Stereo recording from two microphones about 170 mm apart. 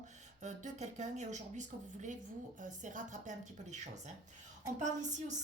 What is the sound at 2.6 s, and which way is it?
Speech, 50° right (ahead or behind).